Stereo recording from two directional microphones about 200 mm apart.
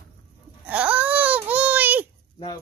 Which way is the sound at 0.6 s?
5° right (ahead or behind).